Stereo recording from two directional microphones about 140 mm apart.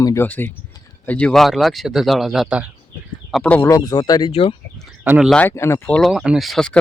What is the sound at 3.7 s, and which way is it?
Speech, 25° left (ahead or behind).